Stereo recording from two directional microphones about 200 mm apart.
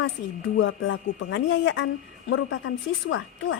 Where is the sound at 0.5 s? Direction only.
70° left (ahead or behind).